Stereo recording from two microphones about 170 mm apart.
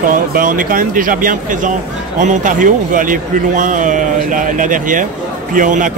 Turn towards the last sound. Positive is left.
turn(degrees=-50)  # may be behind; listen again after turning